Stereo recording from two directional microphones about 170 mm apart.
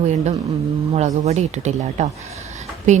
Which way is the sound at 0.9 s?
40° right (ahead or behind).